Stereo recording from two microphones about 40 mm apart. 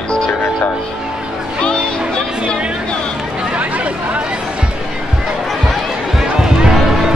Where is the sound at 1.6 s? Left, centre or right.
Left.